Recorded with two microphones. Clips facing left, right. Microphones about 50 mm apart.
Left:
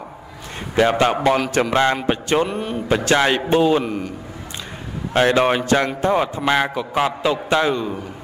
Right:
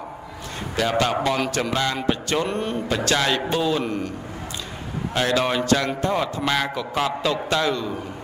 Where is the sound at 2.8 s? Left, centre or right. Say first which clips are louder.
Left 7 dB; left.